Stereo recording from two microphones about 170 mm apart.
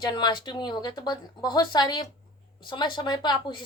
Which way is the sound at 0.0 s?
25° left (ahead or behind).